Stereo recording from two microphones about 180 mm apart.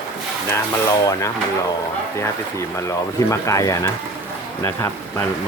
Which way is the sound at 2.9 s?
20° left (ahead or behind).